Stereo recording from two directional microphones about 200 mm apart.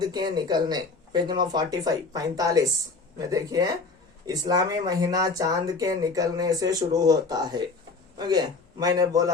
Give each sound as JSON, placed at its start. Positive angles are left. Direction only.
{"t": 0.0, "sound": "speech", "side_deg": -20}